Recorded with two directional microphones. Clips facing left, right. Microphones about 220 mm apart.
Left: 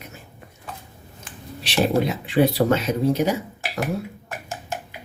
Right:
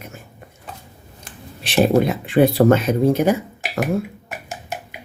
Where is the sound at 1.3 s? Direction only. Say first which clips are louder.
Even; 50° right (ahead or behind).